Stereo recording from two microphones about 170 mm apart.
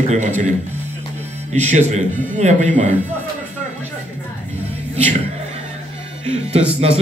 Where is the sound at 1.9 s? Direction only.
45° right (ahead or behind).